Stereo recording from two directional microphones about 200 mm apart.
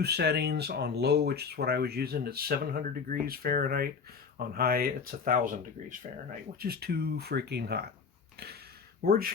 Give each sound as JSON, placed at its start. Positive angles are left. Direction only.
{"t": 0.0, "sound": "speech", "side_deg": -55}
{"t": 6.6, "sound": "speech", "side_deg": -50}
{"t": 9.0, "sound": "speech", "side_deg": -50}